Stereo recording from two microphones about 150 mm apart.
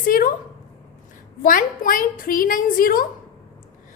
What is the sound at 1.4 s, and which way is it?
A woman's voice, 65° left (ahead or behind).